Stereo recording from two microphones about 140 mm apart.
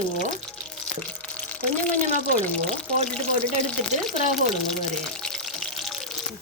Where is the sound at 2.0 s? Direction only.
55° right (ahead or behind).